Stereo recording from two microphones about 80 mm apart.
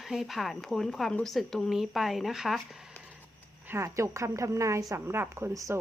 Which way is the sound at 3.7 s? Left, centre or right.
Right.